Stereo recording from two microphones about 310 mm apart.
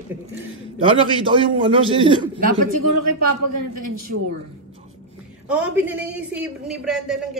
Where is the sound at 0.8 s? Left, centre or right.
Centre.